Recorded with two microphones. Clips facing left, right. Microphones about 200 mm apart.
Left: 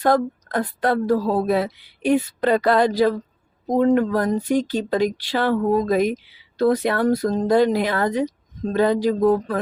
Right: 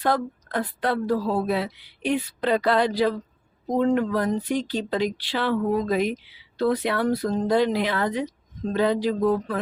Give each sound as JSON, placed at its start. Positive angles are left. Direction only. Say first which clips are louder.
{"t": 0.0, "sound": "speech", "louder": "left 5 dB", "side_deg": 45}